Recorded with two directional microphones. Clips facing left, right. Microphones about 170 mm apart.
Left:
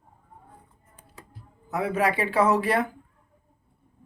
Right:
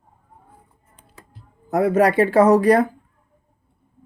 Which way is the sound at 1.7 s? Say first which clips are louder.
Right 8 dB; 45° right (ahead or behind).